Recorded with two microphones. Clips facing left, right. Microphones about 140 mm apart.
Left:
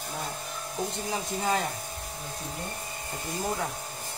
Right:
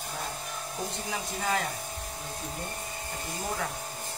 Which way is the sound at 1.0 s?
25° left (ahead or behind).